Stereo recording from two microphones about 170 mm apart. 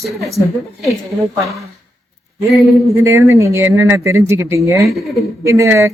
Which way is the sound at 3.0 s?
15° right (ahead or behind).